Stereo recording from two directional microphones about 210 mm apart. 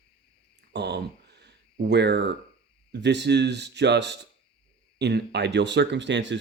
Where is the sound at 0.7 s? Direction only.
55° right (ahead or behind).